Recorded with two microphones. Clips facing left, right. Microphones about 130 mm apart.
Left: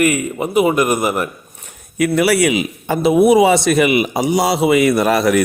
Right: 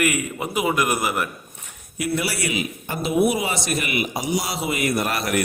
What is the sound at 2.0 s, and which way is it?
A man's voice, 75° left (ahead or behind).